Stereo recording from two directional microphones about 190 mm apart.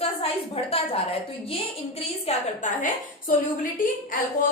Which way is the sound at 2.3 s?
35° left (ahead or behind).